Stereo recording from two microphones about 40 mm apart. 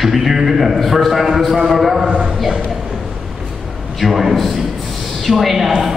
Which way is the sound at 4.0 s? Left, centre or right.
Centre.